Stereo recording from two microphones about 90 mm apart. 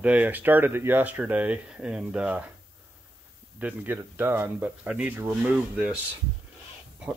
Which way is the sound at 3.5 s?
20° right (ahead or behind).